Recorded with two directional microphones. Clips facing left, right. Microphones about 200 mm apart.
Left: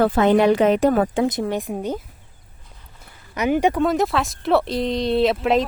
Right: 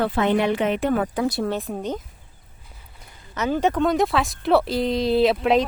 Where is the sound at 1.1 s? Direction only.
20° left (ahead or behind).